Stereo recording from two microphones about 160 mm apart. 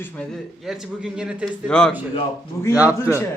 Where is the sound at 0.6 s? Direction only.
5° right (ahead or behind).